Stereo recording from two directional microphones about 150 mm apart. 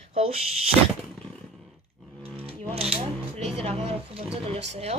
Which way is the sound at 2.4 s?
40° right (ahead or behind).